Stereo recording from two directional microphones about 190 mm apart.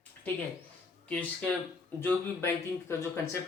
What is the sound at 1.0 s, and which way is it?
A man's voice, 5° left (ahead or behind).